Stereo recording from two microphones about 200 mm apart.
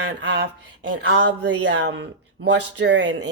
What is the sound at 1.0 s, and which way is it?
Speech, 60° right (ahead or behind).